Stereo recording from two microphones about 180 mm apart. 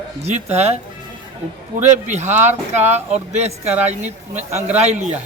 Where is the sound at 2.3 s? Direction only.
40° right (ahead or behind).